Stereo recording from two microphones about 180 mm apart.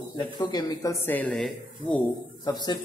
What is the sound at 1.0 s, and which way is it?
Speech, 10° left (ahead or behind).